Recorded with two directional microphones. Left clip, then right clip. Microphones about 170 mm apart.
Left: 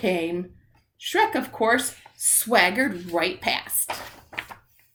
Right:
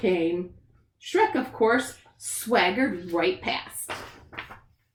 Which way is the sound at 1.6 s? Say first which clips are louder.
Left 1 dB; 15° left (ahead or behind).